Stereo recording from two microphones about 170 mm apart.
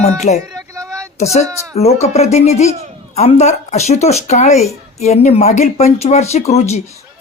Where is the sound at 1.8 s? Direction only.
40° left (ahead or behind).